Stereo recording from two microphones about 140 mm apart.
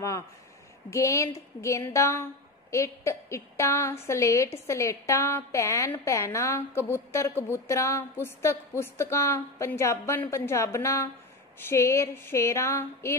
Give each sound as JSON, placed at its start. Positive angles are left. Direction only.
{"t": 0.8, "sound": "a woman's voice", "side_deg": 20}